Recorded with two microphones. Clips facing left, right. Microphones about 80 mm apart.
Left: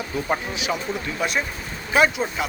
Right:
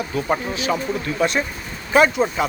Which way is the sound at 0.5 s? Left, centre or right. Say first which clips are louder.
Right 4 dB; centre.